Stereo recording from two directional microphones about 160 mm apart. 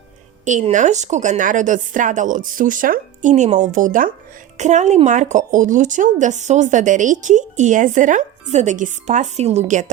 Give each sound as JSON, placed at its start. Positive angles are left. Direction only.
{"t": 0.4, "sound": "speech", "side_deg": -50}